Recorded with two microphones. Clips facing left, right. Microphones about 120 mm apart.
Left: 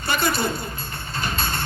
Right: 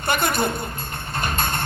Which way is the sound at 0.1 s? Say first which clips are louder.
Right 1 dB; 55° right (ahead or behind).